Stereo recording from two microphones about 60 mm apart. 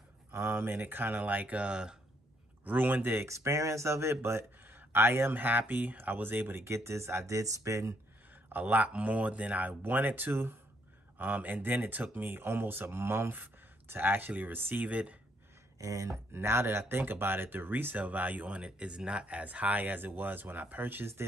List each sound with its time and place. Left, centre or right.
0.3 s speech: right; by 2.0 s centre
2.6 s speech: right
3.3 s speech: right
6.6 s speech: right
8.5 s speech: right
15.8 s speech: right
16.3 s speech: right